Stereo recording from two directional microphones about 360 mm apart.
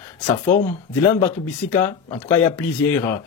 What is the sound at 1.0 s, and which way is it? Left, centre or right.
Speech, centre.